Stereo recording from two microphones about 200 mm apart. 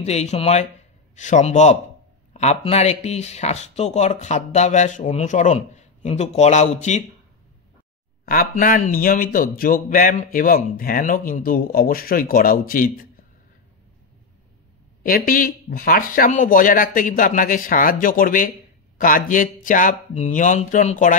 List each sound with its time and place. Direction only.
0.0 s speech: 35° left (ahead or behind)
8.3 s a man's voice: 45° left (ahead or behind)
15.0 s a man's voice: 45° left (ahead or behind)